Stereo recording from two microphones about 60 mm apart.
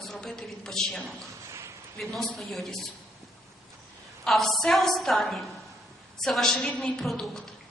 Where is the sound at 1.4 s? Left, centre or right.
Right.